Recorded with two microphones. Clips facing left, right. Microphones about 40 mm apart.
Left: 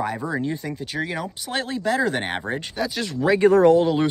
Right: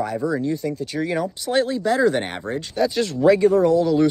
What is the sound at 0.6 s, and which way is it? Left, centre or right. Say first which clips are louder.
Speech: right 3 dB; centre.